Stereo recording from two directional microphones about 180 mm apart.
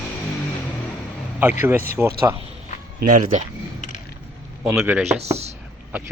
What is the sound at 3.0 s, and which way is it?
Speech, 45° right (ahead or behind).